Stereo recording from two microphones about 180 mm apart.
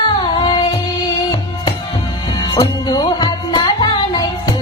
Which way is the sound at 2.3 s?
20° left (ahead or behind).